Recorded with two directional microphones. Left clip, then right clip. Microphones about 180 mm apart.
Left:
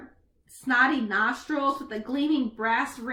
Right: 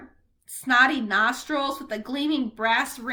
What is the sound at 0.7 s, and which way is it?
Speech, 15° right (ahead or behind).